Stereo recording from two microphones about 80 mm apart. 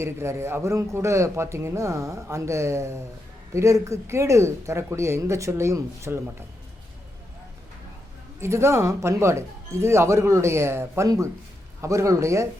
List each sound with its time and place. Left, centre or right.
0.0 s a man's voice: right
8.4 s a man's voice: right